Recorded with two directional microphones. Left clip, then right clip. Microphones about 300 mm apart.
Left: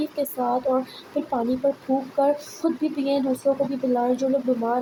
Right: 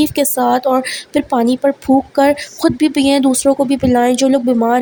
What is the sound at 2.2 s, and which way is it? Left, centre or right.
A woman's voice, right.